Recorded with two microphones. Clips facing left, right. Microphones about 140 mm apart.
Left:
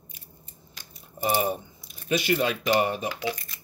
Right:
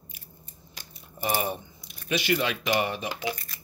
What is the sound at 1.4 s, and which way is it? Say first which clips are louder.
Speech: left 3 dB; 45° left (ahead or behind).